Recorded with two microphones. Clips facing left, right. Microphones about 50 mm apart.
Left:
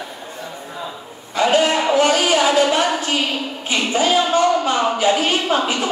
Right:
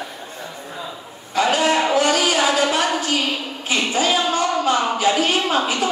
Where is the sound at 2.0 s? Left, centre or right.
Left.